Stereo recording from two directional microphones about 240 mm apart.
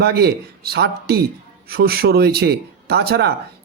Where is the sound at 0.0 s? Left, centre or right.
Right.